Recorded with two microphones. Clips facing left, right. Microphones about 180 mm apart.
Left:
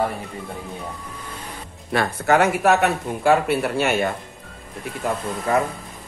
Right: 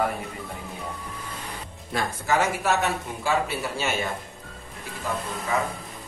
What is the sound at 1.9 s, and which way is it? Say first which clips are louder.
A man's voice: left 6 dB; 65° left (ahead or behind).